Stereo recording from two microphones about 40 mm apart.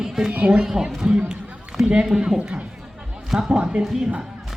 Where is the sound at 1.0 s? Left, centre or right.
Centre.